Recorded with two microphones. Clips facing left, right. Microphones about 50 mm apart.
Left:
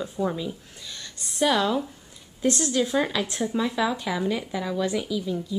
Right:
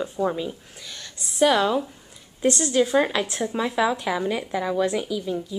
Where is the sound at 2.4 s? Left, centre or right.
Right.